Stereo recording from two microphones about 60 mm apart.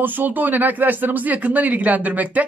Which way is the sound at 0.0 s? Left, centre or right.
Right.